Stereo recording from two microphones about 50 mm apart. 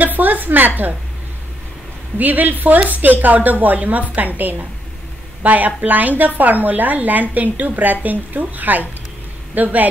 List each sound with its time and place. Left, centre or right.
0.0 s a woman's voice: right
2.1 s a woman's voice: right